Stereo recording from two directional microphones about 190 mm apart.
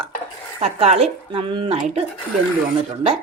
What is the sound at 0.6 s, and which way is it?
Speech, 35° right (ahead or behind).